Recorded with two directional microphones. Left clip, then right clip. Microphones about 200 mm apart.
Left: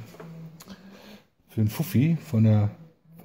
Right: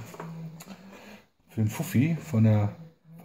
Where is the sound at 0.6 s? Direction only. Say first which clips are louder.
Even; 35° left (ahead or behind).